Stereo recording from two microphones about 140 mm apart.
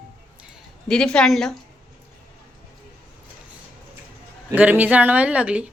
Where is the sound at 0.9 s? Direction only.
5° left (ahead or behind).